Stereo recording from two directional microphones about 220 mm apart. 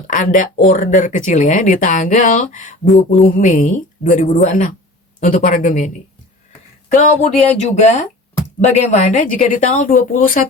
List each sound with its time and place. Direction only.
0.1 s speech: 35° left (ahead or behind)